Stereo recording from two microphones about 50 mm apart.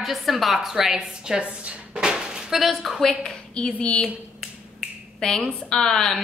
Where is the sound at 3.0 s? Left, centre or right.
Centre.